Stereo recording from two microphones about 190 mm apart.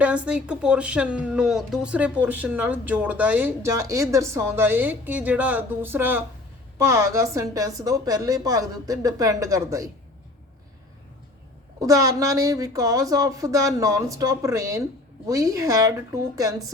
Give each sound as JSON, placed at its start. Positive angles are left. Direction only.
{"t": 0.0, "sound": "a woman's voice", "side_deg": -5}
{"t": 11.8, "sound": "a woman's voice", "side_deg": -15}